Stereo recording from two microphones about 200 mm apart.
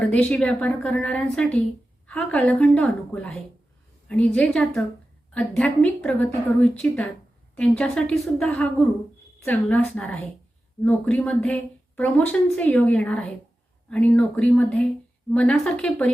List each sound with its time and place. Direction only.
0.1 s a woman's voice: 5° left (ahead or behind)